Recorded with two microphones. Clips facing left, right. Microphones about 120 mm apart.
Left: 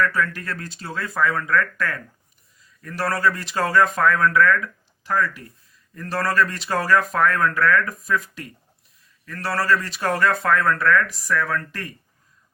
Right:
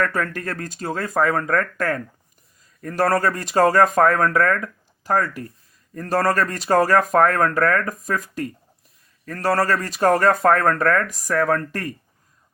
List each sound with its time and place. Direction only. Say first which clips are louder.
0.0 s speech: even; 45° right (ahead or behind)